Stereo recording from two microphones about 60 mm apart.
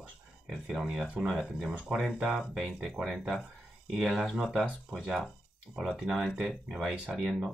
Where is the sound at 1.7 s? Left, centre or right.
Right.